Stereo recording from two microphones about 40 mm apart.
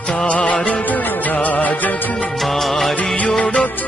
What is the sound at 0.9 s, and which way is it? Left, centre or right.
Music, left.